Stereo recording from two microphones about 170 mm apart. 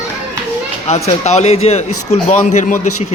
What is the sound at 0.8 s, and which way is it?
A child's voice, 40° left (ahead or behind).